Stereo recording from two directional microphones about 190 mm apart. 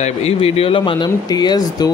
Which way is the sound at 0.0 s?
35° left (ahead or behind).